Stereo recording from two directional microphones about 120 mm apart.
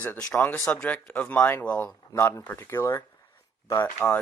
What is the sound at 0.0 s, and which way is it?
Speech, 10° left (ahead or behind).